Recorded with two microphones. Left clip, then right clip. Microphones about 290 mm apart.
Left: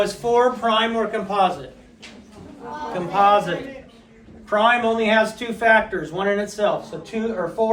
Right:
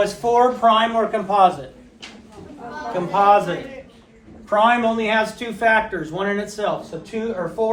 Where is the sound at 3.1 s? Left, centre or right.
Centre.